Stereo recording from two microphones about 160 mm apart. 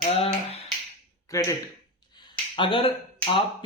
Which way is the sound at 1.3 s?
20° left (ahead or behind).